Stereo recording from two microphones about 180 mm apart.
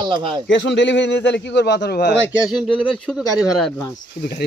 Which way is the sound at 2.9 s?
Centre (ahead or behind).